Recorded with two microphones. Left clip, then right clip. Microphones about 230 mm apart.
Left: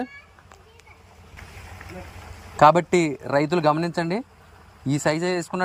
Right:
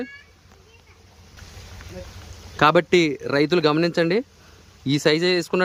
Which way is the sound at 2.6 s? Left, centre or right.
Centre.